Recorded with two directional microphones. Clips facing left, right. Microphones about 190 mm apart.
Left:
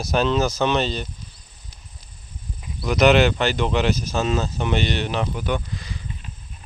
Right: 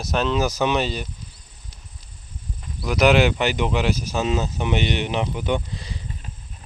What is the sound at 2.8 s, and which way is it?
Speech, 5° right (ahead or behind).